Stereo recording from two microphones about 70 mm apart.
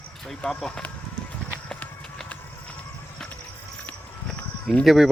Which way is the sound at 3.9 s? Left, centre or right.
Left.